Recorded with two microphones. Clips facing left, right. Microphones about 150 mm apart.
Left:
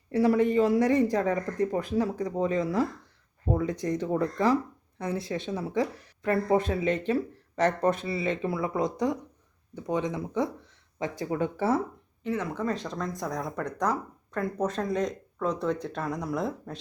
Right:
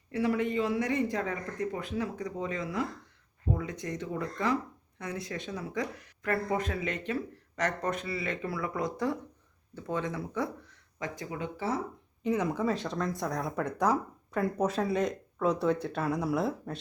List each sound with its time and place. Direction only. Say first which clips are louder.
0.1 s speech: left 6 dB; 40° left (ahead or behind)
11.3 s speech: left 8 dB; 50° left (ahead or behind)
12.2 s speech: right 1 dB; 15° right (ahead or behind)